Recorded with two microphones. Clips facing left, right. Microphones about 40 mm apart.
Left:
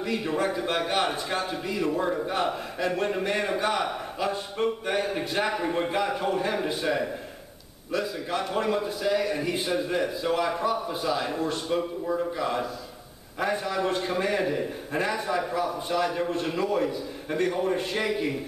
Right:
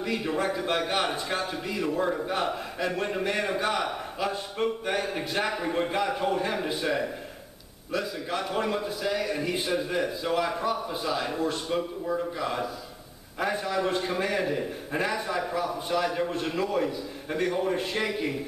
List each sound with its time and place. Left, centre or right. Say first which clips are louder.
0.0 s a man's voice: left 1 dB; centre